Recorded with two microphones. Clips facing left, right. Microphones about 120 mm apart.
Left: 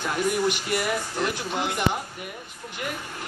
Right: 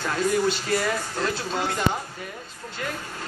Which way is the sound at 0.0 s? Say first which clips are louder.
Right 1 dB; 15° left (ahead or behind).